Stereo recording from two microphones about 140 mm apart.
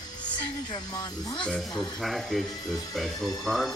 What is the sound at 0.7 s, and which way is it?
Speech, 30° left (ahead or behind).